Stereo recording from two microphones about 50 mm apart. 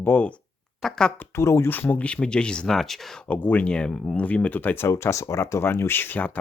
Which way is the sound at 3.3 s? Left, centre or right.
Left.